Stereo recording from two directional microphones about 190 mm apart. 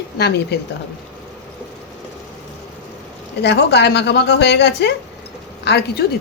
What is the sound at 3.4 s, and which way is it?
A woman's voice, 60° left (ahead or behind).